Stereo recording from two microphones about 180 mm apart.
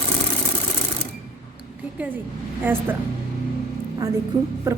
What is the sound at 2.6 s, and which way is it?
Speech, 10° right (ahead or behind).